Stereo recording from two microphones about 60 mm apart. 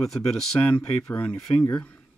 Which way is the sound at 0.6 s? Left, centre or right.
Centre.